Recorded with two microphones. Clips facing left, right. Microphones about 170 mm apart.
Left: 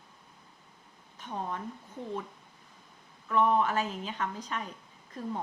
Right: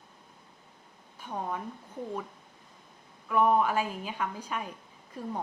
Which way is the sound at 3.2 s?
10° right (ahead or behind).